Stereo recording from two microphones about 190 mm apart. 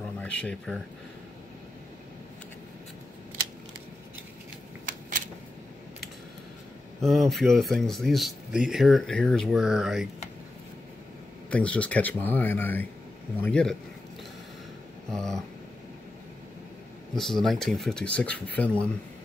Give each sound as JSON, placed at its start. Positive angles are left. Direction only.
{"t": 0.2, "sound": "speech", "side_deg": 5}
{"t": 4.8, "sound": "a sound", "side_deg": -45}
{"t": 7.0, "sound": "speech", "side_deg": 0}
{"t": 11.5, "sound": "speech", "side_deg": 5}
{"t": 15.0, "sound": "speech", "side_deg": 5}
{"t": 17.1, "sound": "speech", "side_deg": 0}